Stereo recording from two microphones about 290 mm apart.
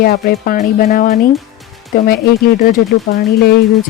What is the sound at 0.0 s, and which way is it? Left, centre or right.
Speech, left.